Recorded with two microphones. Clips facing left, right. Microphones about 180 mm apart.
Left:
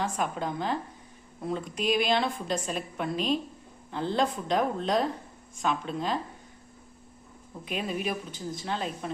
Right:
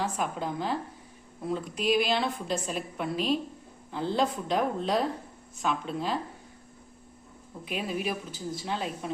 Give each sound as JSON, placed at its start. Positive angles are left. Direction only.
{"t": 0.0, "sound": "a woman's voice", "side_deg": -5}
{"t": 7.6, "sound": "a woman's voice", "side_deg": -5}